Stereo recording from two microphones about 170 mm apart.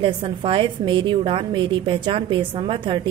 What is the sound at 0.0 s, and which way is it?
A woman's voice, 30° right (ahead or behind).